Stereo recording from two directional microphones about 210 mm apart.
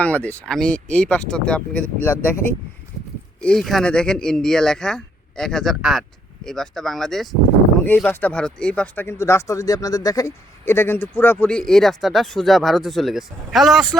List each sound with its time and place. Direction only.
0.0 s speech: 5° left (ahead or behind)
3.4 s speech: centre (ahead or behind)